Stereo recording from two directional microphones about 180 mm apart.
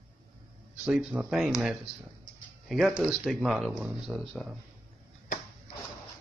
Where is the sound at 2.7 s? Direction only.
5° right (ahead or behind).